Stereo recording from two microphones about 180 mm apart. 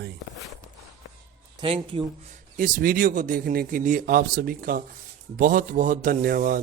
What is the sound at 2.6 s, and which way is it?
A man's voice, 50° right (ahead or behind).